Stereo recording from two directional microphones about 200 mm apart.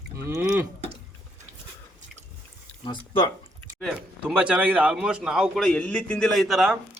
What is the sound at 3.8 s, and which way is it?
A man's voice, 5° right (ahead or behind).